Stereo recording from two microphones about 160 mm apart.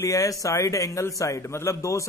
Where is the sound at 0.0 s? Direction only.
20° left (ahead or behind).